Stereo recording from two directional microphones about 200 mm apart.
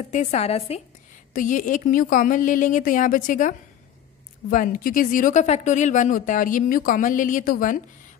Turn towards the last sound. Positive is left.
turn(degrees=40)  # may be behind; listen again after turning